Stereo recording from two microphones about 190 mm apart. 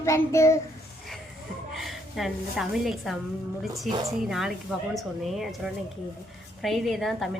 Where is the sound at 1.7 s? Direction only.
Centre (ahead or behind).